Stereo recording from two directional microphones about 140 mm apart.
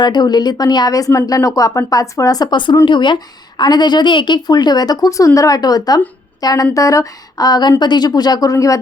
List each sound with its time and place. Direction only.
0.0 s a woman's voice: 30° left (ahead or behind)